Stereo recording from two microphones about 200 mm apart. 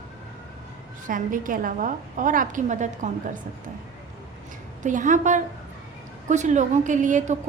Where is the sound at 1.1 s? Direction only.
40° right (ahead or behind).